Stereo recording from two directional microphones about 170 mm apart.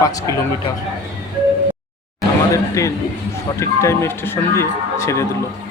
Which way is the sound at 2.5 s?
20° left (ahead or behind).